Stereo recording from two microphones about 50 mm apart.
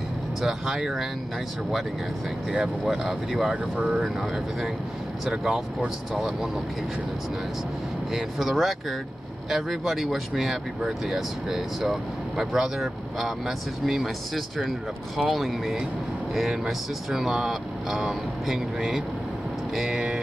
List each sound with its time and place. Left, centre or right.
0.4 s speech: centre
2.8 s speech: centre
3.7 s speech: right
4.0 s speech: centre
5.3 s speech: centre
8.1 s speech: centre